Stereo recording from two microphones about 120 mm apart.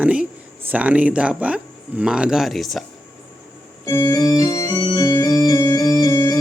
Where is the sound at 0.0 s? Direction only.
10° right (ahead or behind).